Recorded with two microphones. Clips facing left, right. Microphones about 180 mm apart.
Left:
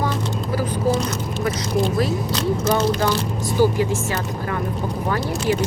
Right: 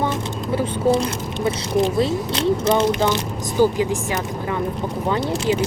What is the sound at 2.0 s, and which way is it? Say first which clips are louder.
Speech: right 2 dB; 25° right (ahead or behind).